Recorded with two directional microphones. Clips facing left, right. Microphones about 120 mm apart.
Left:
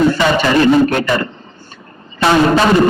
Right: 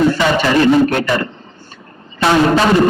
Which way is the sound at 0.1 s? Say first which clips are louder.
Left 1 dB; 20° left (ahead or behind).